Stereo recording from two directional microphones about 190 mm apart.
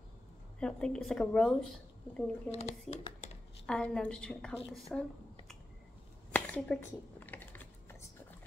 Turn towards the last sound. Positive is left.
turn(degrees=10)  # may be behind; listen again after turning